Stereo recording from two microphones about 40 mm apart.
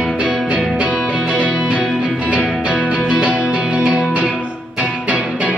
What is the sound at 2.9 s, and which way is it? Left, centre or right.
Music, centre.